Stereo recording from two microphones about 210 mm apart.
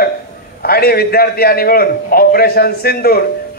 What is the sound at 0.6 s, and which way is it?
A man's voice, 45° left (ahead or behind).